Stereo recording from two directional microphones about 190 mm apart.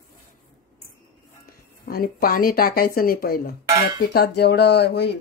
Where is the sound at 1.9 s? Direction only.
50° left (ahead or behind).